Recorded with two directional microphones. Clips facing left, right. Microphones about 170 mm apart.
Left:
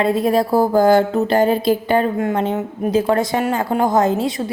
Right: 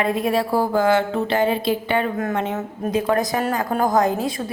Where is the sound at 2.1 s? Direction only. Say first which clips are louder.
Left 4 dB; 30° left (ahead or behind).